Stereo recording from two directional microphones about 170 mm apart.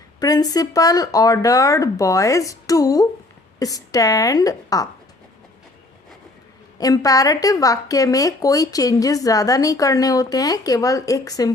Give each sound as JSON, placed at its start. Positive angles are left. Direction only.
{"t": 0.2, "sound": "a woman's voice", "side_deg": 20}
{"t": 6.7, "sound": "a woman's voice", "side_deg": 20}